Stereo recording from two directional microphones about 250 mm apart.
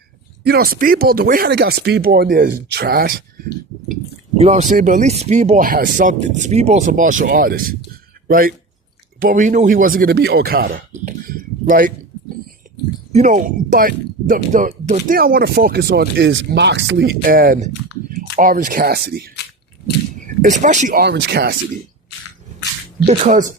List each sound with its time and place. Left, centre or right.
0.4 s speech: right
4.4 s speech: right
13.1 s speech: right
17.2 s speech: right
20.2 s speech: right
23.0 s speech: right